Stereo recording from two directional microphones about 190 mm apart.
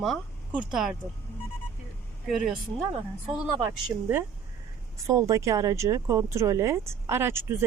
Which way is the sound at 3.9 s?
20° right (ahead or behind).